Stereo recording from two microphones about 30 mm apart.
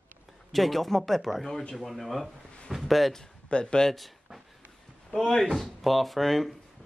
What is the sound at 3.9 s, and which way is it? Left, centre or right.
Speech, centre.